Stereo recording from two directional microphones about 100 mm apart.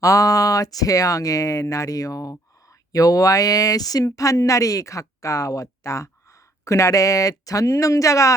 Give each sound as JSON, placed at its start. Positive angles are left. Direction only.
{"t": 0.0, "sound": "speech", "side_deg": 35}